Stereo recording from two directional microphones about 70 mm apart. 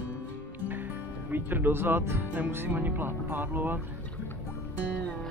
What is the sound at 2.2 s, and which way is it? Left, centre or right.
Speech, right.